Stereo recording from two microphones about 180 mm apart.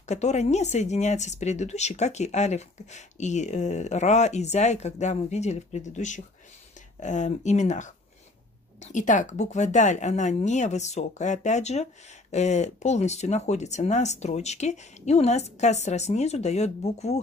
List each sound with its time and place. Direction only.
0.0 s speech: 40° left (ahead or behind)